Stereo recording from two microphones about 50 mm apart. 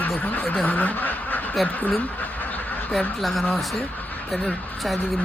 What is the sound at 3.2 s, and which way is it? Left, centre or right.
Speech, centre.